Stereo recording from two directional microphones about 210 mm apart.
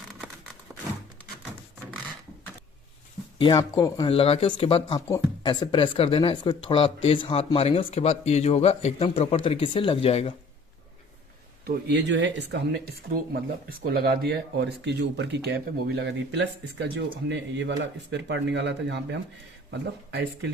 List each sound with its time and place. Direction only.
0.7 s a sound: 10° right (ahead or behind)
3.4 s speech: 20° left (ahead or behind)
11.6 s speech: 55° right (ahead or behind)